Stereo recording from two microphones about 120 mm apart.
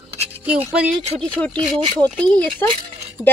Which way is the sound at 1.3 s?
10° left (ahead or behind).